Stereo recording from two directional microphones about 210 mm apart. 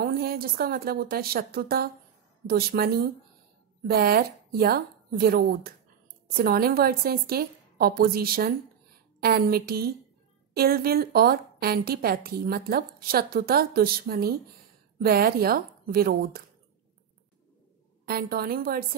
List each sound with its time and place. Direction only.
0.0 s a woman's voice: 45° right (ahead or behind)
18.0 s a woman's voice: 45° right (ahead or behind)